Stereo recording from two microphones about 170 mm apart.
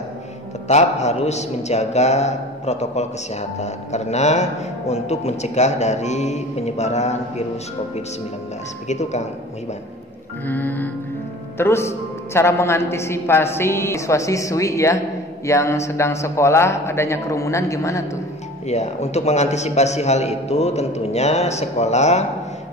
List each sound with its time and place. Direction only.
0.7 s a man's voice: 40° left (ahead or behind)
8.8 s speech: 45° left (ahead or behind)
10.4 s a woman's voice: 10° left (ahead or behind)
18.7 s a man's voice: 40° left (ahead or behind)